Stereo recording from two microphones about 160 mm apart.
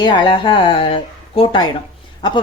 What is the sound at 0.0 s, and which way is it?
Speech, 30° left (ahead or behind).